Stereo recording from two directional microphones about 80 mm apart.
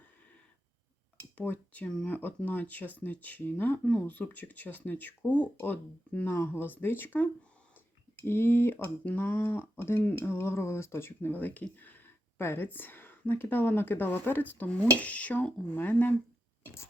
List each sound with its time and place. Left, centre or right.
1.4 s speech: centre
10.0 s speech: centre
10.2 s speech: left